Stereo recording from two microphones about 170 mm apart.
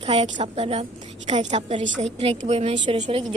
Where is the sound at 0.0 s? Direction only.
35° right (ahead or behind).